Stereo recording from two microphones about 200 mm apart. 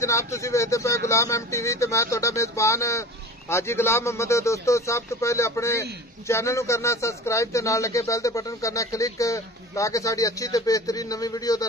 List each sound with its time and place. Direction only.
0.0 s speech: 15° left (ahead or behind)